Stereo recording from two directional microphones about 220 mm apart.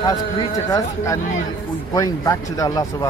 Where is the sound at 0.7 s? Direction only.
15° left (ahead or behind).